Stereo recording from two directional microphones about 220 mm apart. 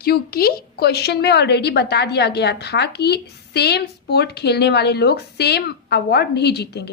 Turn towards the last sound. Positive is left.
turn(degrees=50)  # may be behind; listen again after turning